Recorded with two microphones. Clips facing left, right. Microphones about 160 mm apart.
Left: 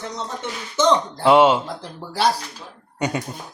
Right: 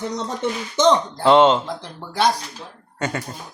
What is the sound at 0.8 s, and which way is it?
Speech, 10° left (ahead or behind).